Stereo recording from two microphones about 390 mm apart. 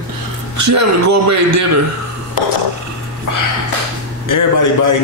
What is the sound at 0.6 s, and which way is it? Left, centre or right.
A man's voice, right.